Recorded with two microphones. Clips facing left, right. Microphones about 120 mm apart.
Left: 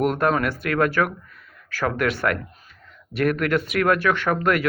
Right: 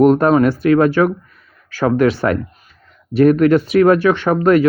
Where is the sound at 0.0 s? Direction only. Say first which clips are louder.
Right 10 dB; 30° right (ahead or behind).